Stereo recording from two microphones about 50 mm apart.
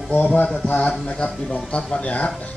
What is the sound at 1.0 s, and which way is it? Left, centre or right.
Speech, centre.